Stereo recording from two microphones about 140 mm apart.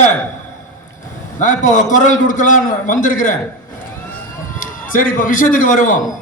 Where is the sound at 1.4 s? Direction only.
65° left (ahead or behind).